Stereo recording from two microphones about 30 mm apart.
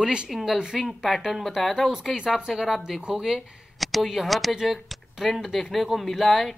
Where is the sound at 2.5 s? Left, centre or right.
Centre.